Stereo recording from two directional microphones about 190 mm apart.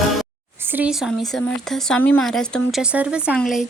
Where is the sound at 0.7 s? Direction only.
5° right (ahead or behind).